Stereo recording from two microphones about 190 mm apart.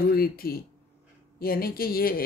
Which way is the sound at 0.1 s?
50° left (ahead or behind).